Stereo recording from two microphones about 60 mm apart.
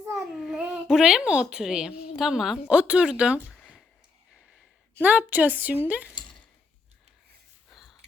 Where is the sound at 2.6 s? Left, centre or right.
Centre.